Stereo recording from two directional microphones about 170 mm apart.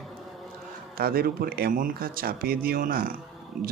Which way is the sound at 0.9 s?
60° right (ahead or behind).